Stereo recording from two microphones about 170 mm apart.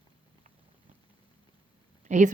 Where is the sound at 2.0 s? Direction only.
45° right (ahead or behind).